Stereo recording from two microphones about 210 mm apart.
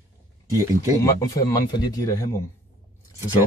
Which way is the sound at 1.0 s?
15° left (ahead or behind).